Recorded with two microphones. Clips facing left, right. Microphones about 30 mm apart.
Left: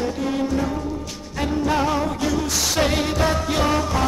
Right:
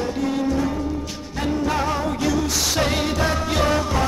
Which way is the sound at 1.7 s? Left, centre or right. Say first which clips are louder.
Left 2 dB; centre.